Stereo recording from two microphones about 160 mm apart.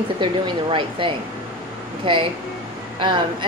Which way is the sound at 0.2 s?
30° right (ahead or behind).